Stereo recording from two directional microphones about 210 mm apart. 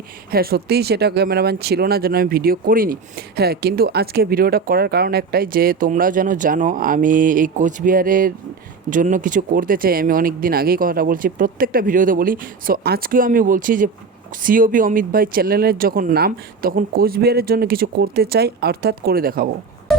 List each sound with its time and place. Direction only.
0.3 s speech: 45° right (ahead or behind)